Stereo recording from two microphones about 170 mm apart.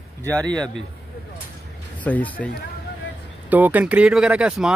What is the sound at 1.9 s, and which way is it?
Speech, 10° left (ahead or behind).